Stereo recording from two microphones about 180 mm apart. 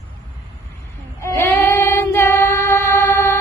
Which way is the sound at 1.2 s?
15° left (ahead or behind).